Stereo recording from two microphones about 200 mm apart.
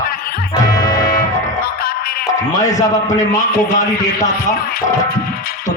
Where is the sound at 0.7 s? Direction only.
20° left (ahead or behind).